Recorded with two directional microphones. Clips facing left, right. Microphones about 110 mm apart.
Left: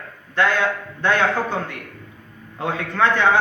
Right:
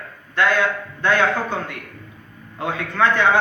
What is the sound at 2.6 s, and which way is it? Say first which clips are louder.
Speech: even; 25° left (ahead or behind).